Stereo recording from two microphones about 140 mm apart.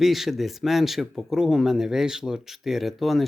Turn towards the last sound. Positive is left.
turn(degrees=0)  # may be behind; listen again after turning